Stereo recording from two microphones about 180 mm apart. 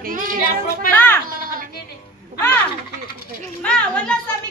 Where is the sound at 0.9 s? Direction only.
10° left (ahead or behind).